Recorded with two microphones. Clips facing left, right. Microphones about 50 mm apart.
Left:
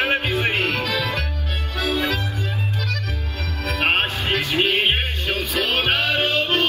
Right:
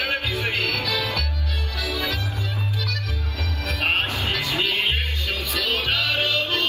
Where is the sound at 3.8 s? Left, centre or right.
Left.